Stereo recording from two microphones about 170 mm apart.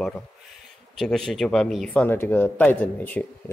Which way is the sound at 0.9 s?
Centre (ahead or behind).